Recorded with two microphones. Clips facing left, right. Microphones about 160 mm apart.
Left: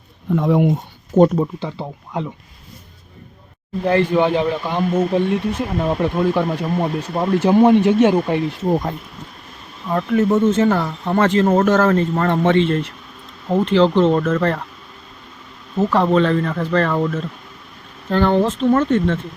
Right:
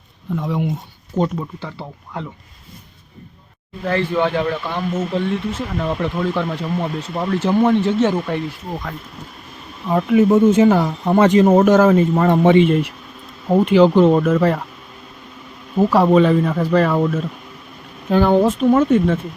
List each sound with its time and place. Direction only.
0.3 s speech: 60° left (ahead or behind)
1.1 s speech: 45° left (ahead or behind)
1.5 s speech: 15° left (ahead or behind)
3.8 s speech: 15° left (ahead or behind)
9.8 s speech: 10° right (ahead or behind)
15.7 s speech: 10° right (ahead or behind)